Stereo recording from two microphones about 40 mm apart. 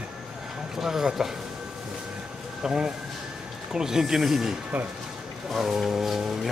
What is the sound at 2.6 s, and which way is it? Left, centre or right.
Speech, centre.